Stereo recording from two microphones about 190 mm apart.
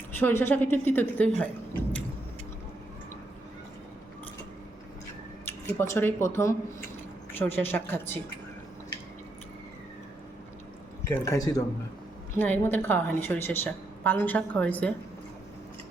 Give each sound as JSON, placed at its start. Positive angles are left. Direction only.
{"t": 0.2, "sound": "a woman's voice", "side_deg": 10}
{"t": 5.5, "sound": "a woman's voice", "side_deg": 10}
{"t": 11.1, "sound": "a woman's voice", "side_deg": 15}